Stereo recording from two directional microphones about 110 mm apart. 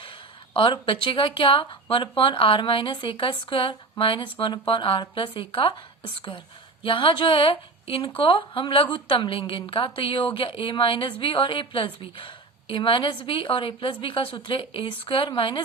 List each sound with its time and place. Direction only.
0.5 s speech: 50° left (ahead or behind)
6.8 s speech: 50° left (ahead or behind)